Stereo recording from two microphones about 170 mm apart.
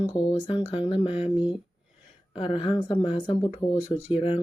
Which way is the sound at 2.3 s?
30° left (ahead or behind).